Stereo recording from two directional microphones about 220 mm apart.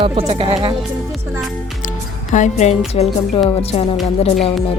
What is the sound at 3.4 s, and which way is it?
Speech, 25° left (ahead or behind).